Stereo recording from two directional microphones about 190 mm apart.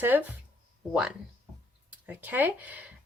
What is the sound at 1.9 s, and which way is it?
Speech, 10° right (ahead or behind).